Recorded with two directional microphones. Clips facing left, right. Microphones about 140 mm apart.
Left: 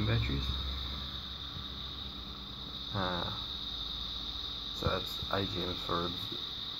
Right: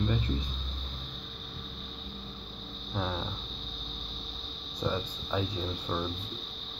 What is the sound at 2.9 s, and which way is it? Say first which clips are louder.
Speech: right 2 dB; 5° right (ahead or behind).